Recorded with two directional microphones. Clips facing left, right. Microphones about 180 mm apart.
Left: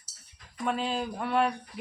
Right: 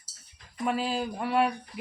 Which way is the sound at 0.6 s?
5° right (ahead or behind).